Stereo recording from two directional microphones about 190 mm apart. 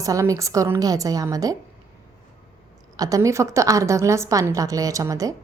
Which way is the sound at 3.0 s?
15° right (ahead or behind).